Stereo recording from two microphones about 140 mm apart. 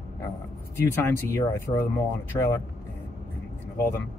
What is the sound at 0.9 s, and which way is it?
Speech, 15° left (ahead or behind).